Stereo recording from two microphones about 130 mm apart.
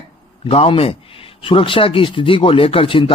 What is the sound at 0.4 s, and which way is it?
Speech, 50° left (ahead or behind).